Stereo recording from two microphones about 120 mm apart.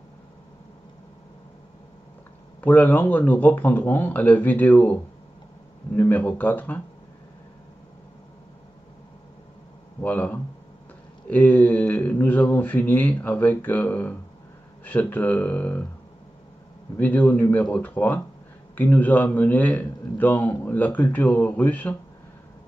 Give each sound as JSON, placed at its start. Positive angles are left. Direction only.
{"t": 2.6, "sound": "a man's voice", "side_deg": 15}
{"t": 5.9, "sound": "a man's voice", "side_deg": 15}
{"t": 10.0, "sound": "a man's voice", "side_deg": 15}
{"t": 16.9, "sound": "a man's voice", "side_deg": 15}